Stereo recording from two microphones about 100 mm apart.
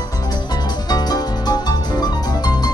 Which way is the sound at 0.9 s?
45° left (ahead or behind).